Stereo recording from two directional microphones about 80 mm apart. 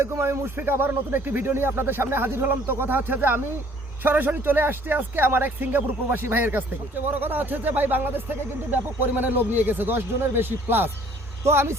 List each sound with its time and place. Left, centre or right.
0.0 s speech: right